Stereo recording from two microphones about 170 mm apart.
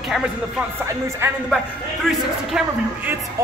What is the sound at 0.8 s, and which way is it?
Speech, 15° right (ahead or behind).